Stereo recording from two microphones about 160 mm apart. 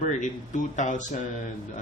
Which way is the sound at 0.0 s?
50° left (ahead or behind).